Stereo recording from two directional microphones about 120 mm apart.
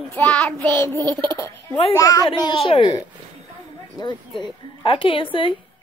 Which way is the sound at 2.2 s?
45° left (ahead or behind).